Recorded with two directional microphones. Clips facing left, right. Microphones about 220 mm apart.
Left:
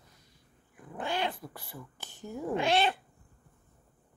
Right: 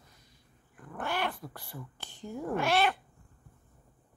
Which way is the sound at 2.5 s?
20° left (ahead or behind).